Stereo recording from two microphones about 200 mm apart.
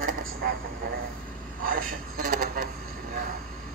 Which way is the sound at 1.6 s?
45° right (ahead or behind).